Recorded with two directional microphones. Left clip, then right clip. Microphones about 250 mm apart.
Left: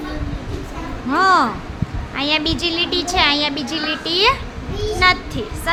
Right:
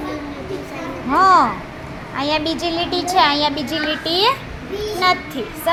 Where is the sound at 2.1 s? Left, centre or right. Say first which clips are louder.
Left 1 dB; left.